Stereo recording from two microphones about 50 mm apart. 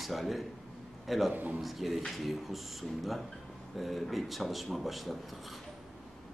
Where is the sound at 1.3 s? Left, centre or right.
Right.